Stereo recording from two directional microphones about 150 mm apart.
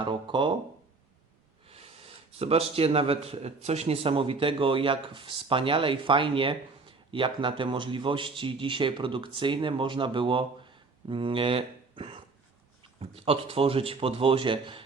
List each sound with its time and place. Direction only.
0.0 s speech: 35° right (ahead or behind)
1.6 s speech: 40° right (ahead or behind)